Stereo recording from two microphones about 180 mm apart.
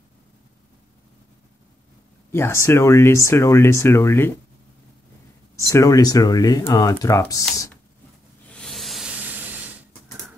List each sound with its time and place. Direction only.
2.3 s speech: 15° left (ahead or behind)
5.6 s speech: 15° left (ahead or behind)
8.5 s hiss: 5° left (ahead or behind)